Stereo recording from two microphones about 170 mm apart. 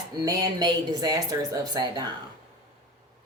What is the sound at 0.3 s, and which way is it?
A woman's voice, 20° right (ahead or behind).